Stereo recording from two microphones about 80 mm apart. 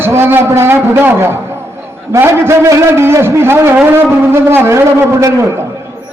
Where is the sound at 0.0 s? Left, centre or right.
Right.